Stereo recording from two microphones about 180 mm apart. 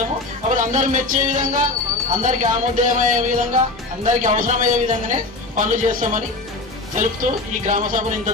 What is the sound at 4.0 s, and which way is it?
A man's voice, 45° right (ahead or behind).